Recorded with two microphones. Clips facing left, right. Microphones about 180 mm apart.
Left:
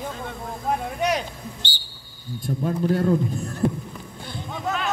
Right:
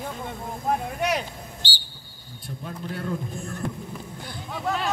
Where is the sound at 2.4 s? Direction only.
40° left (ahead or behind).